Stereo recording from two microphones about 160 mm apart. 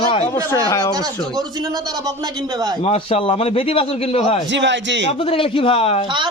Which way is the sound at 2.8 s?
40° left (ahead or behind).